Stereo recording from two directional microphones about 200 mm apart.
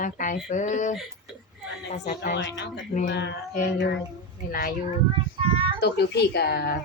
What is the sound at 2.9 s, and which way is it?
Speech, 40° left (ahead or behind).